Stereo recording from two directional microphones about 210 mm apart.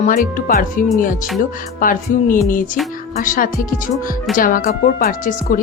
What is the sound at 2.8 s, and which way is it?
Speech, centre (ahead or behind).